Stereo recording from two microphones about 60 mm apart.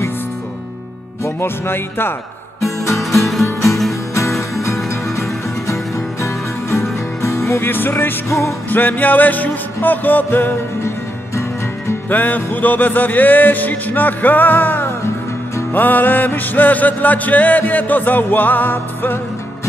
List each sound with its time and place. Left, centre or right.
1.2 s music: left
2.6 s music: left
3.2 s music: centre
5.7 s music: left
8.3 s music: left
8.6 s music: left
12.1 s music: left